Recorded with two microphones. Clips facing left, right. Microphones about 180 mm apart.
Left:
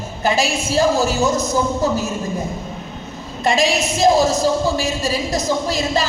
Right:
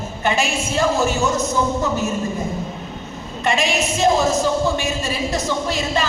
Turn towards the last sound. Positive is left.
turn(degrees=40)  # may be behind; listen again after turning